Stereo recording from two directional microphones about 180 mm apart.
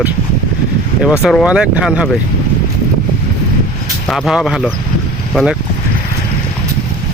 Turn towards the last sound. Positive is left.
turn(degrees=-5)  # may be behind; listen again after turning